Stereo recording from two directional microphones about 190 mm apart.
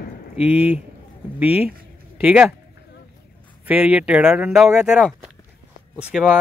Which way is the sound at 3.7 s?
5° right (ahead or behind).